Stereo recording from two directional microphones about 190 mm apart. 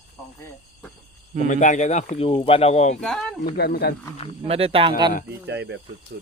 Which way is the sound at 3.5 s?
55° left (ahead or behind).